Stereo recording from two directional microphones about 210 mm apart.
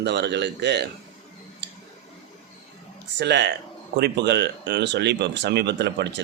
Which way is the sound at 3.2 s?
55° right (ahead or behind).